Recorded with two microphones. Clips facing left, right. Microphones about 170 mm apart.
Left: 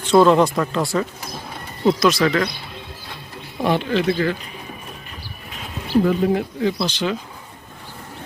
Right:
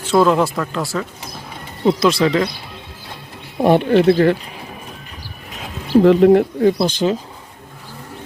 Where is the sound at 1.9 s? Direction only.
30° right (ahead or behind).